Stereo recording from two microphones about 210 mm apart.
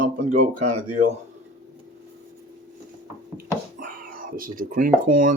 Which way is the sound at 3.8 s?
40° right (ahead or behind).